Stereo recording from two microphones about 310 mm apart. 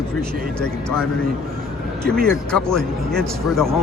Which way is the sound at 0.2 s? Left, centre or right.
Centre.